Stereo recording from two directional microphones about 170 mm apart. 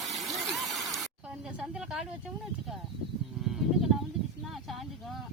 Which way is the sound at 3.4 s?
Centre (ahead or behind).